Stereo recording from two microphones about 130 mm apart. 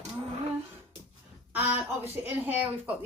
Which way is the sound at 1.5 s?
15° right (ahead or behind).